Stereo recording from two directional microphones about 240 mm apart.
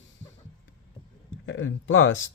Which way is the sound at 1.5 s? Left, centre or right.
Left.